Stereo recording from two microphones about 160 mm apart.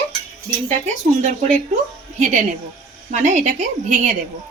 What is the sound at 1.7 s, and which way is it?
Speech, 50° right (ahead or behind).